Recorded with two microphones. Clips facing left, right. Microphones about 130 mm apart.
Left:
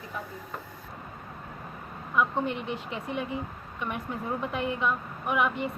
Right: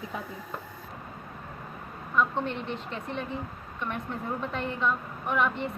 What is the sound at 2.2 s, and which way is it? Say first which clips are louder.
A woman's voice: even; 10° left (ahead or behind).